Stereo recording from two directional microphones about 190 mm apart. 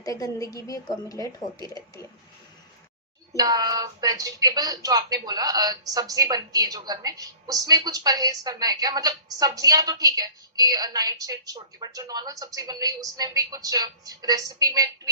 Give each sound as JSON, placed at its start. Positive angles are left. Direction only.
{"t": 0.0, "sound": "a woman's voice", "side_deg": 20}
{"t": 3.3, "sound": "speech", "side_deg": -20}